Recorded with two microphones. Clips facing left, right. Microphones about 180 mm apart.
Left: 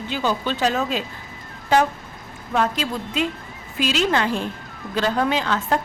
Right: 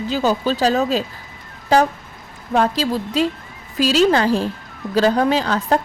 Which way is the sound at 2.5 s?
35° right (ahead or behind).